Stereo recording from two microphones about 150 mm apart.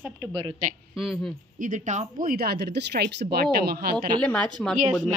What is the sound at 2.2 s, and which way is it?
Speech, 90° right.